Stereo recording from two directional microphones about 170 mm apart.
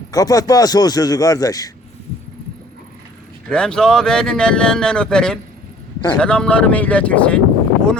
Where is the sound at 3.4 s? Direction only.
5° left (ahead or behind).